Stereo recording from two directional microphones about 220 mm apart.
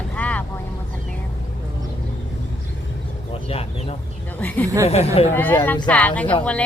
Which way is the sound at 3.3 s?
25° left (ahead or behind).